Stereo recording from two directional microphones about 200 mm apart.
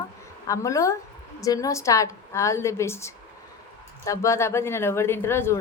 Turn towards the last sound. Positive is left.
turn(degrees=10)  # may be behind; listen again after turning